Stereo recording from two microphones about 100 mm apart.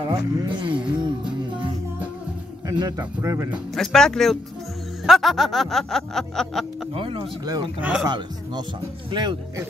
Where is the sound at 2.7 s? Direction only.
35° right (ahead or behind).